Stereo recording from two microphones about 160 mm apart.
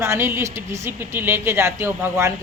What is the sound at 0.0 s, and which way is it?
A woman's voice, 15° right (ahead or behind).